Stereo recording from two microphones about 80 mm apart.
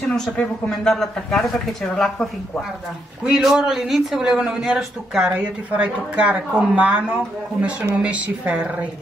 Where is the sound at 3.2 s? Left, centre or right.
Centre.